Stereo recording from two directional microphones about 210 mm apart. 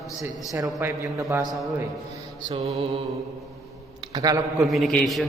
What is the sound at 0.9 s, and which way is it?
Speech, 15° right (ahead or behind).